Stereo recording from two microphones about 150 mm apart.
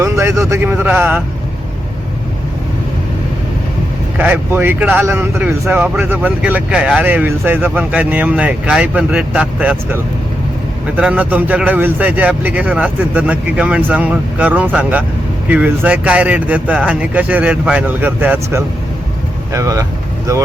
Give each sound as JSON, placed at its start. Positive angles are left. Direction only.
{"t": 0.0, "sound": "a man's voice", "side_deg": -20}
{"t": 4.2, "sound": "speech", "side_deg": -15}